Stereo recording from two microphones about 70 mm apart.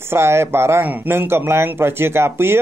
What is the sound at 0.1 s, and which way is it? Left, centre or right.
Speech, right.